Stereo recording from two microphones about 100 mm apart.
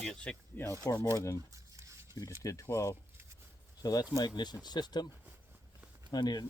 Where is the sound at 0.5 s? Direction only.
30° left (ahead or behind).